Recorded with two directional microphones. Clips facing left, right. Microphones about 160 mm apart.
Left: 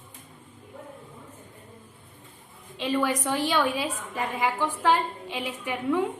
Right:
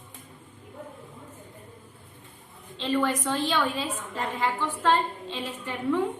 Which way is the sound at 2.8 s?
10° left (ahead or behind).